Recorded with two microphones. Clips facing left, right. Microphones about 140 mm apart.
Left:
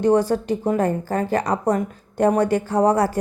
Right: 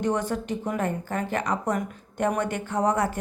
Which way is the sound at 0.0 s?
35° left (ahead or behind).